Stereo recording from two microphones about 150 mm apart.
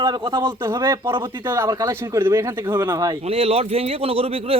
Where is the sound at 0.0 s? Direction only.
30° right (ahead or behind).